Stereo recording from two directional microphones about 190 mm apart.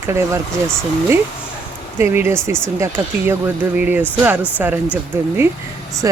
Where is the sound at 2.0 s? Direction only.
15° right (ahead or behind).